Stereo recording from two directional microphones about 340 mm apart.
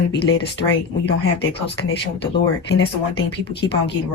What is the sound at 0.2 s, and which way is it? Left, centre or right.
Speech, left.